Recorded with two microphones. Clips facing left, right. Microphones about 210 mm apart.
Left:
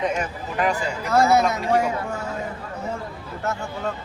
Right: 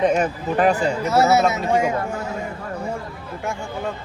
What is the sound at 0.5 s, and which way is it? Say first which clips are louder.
Speech: right 5 dB; 35° right (ahead or behind).